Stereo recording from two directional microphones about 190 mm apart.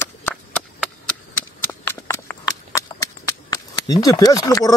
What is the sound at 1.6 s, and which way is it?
Horse, 10° left (ahead or behind).